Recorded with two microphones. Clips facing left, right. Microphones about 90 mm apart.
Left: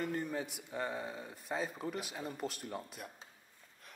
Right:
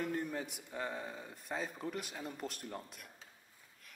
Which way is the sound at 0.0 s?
Centre (ahead or behind).